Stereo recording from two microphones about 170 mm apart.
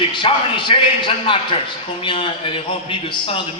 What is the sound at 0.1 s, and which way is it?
A man's voice, 30° left (ahead or behind).